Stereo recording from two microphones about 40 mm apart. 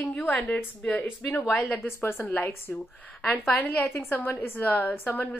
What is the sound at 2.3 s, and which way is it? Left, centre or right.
Speech, left.